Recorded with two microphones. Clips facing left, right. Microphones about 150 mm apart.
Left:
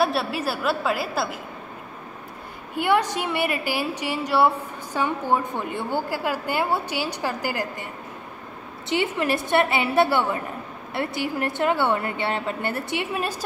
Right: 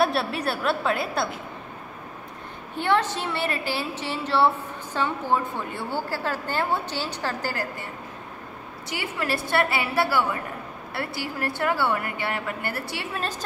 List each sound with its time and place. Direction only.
0.0 s a woman's voice: centre (ahead or behind)
2.7 s a woman's voice: 10° left (ahead or behind)
8.8 s a woman's voice: 25° left (ahead or behind)